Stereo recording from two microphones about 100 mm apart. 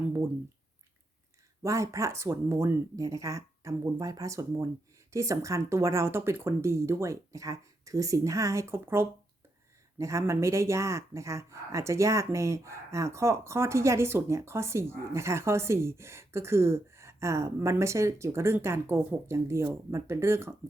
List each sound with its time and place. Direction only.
1.6 s speech: 30° right (ahead or behind)